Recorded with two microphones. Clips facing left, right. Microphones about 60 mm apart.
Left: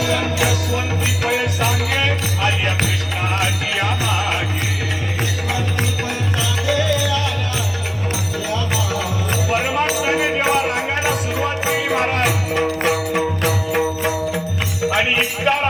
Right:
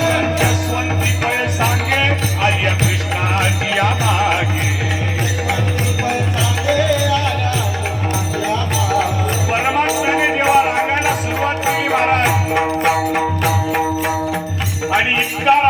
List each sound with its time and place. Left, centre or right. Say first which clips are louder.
0.0 s music: right 3 dB; right
3.8 s music: right 5 dB; right
6.7 s music: right 4 dB; right
8.4 s music: right 3 dB; right
14.8 s music: right 2 dB; right